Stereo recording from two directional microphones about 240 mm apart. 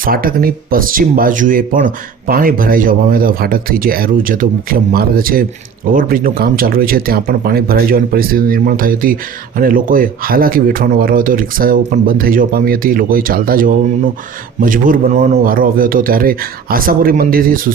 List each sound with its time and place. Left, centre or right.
0.0 s speech: right